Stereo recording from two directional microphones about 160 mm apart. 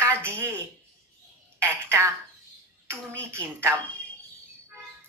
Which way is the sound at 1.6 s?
15° right (ahead or behind).